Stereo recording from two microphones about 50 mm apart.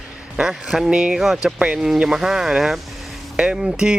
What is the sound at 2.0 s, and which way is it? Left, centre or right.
Speech, centre.